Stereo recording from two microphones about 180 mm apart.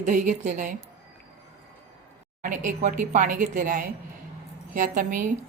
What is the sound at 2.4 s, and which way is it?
Speech, 45° right (ahead or behind).